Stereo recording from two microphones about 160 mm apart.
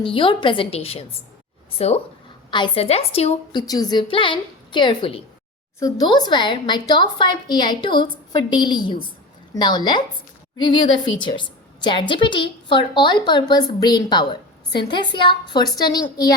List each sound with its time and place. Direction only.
0.0 s a woman's voice: 35° left (ahead or behind)
2.5 s a woman's voice: 30° left (ahead or behind)
3.5 s a woman's voice: 25° left (ahead or behind)